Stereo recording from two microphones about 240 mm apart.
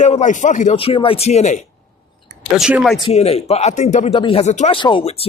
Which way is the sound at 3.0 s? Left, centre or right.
Left.